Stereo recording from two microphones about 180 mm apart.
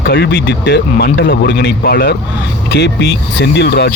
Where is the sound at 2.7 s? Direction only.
75° left (ahead or behind).